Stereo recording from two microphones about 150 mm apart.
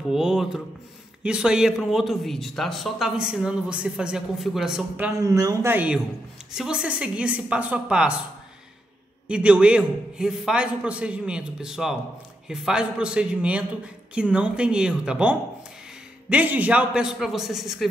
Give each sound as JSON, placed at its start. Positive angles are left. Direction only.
{"t": 0.1, "sound": "speech", "side_deg": -5}
{"t": 5.2, "sound": "a man's voice", "side_deg": -25}
{"t": 9.3, "sound": "a man's voice", "side_deg": -5}